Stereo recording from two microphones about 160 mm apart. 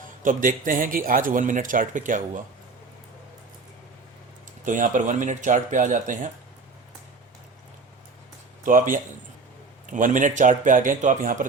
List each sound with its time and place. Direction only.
0.2 s a man's voice: 55° right (ahead or behind)
4.6 s speech: 55° right (ahead or behind)
8.6 s a man's voice: 55° right (ahead or behind)